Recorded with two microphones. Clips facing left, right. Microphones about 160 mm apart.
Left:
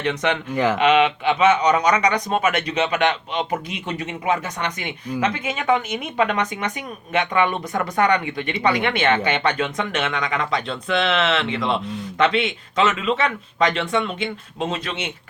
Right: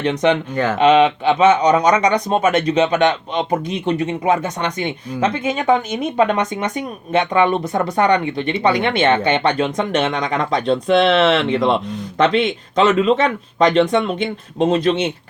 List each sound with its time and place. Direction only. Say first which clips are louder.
0.0 s speech: right 6 dB; 30° right (ahead or behind)
0.5 s speech: right 1 dB; 10° left (ahead or behind)
0.8 s speech: right 7 dB; 30° right (ahead or behind)